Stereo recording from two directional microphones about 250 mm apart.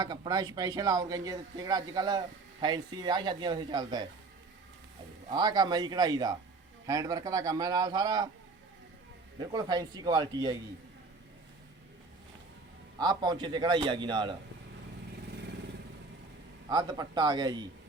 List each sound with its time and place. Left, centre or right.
0.0 s a man's voice: centre
5.3 s a man's voice: centre
9.4 s a man's voice: centre
13.0 s a man's voice: centre
16.6 s a man's voice: centre